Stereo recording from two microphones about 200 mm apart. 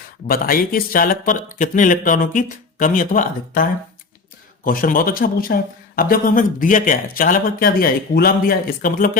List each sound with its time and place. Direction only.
0.3 s speech: 45° left (ahead or behind)